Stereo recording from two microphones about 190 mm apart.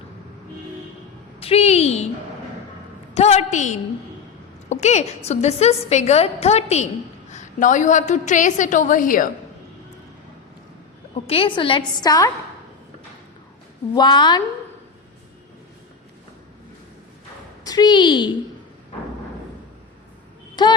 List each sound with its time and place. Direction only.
1.4 s a sound: 30° left (ahead or behind)
3.2 s a woman's voice: 35° left (ahead or behind)
11.3 s a woman's voice: 25° left (ahead or behind)
13.9 s a woman's voice: 25° left (ahead or behind)
17.6 s a woman's voice: 20° left (ahead or behind)
20.6 s a woman's voice: 25° left (ahead or behind)